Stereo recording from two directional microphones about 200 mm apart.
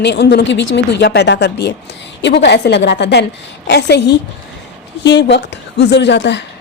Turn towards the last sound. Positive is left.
turn(degrees=60)  # may be behind; listen again after turning